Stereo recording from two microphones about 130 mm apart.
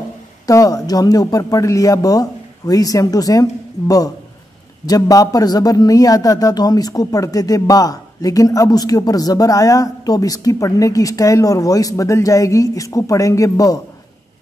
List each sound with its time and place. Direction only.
0.5 s speech: 25° left (ahead or behind)